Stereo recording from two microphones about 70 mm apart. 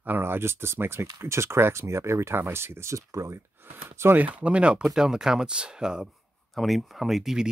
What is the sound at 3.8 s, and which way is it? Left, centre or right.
Speech, right.